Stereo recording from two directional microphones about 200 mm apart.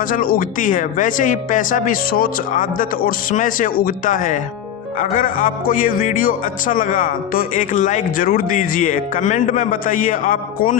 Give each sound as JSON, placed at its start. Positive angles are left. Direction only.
{"t": 0.1, "sound": "speech", "side_deg": 45}